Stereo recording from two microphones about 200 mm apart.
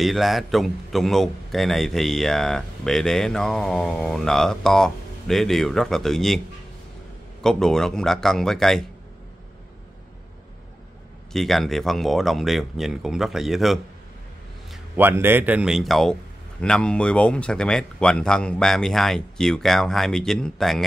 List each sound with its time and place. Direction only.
0.0 s a man's voice: centre (ahead or behind)
7.4 s a man's voice: 5° left (ahead or behind)
11.3 s a man's voice: centre (ahead or behind)